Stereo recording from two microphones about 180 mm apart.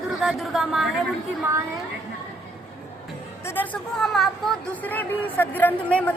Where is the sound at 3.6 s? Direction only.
Centre (ahead or behind).